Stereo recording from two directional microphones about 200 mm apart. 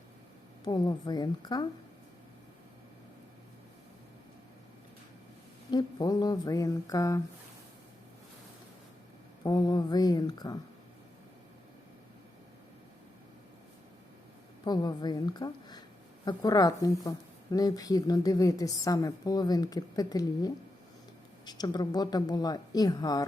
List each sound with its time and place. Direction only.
0.6 s speech: 20° left (ahead or behind)
5.7 s speech: 20° left (ahead or behind)
9.4 s speech: 20° left (ahead or behind)
14.6 s a woman's voice: 20° left (ahead or behind)